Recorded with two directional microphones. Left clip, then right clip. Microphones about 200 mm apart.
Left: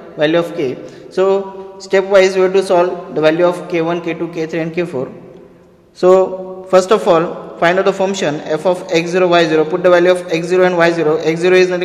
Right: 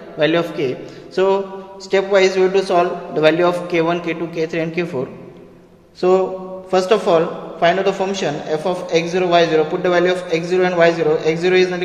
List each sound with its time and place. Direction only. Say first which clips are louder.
0.2 s a man's voice: left 3 dB; 20° left (ahead or behind)
3.2 s a man's voice: left 2 dB; 15° left (ahead or behind); by 11.8 s 35° left (ahead or behind)